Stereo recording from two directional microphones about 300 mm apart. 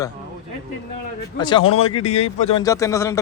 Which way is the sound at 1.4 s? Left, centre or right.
Centre.